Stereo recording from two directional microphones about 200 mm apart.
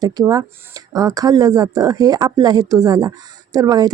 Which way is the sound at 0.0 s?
20° right (ahead or behind).